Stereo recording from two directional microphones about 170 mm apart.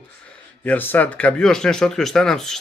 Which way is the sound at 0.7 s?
10° left (ahead or behind).